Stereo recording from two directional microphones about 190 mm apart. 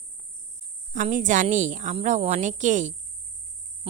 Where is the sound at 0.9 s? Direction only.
45° right (ahead or behind).